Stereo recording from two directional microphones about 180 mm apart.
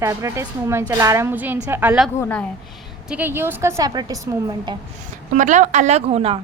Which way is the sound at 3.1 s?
10° right (ahead or behind).